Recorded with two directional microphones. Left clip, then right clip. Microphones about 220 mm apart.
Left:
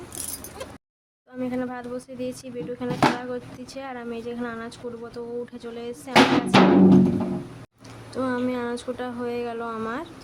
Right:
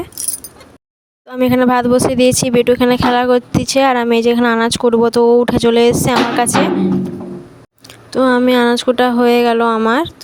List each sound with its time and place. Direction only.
1.3 s speech: 50° right (ahead or behind)
8.1 s speech: 40° right (ahead or behind)